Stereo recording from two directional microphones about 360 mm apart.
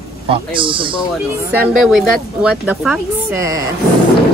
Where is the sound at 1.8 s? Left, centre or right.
Centre.